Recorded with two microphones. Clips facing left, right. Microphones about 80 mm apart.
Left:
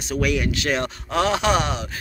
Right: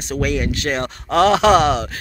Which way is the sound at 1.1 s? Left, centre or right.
Right.